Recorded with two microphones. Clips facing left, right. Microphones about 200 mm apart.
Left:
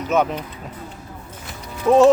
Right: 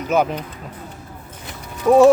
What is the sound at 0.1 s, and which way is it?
Speech, centre (ahead or behind).